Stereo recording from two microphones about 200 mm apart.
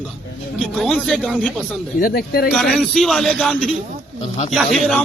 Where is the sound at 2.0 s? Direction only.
50° left (ahead or behind).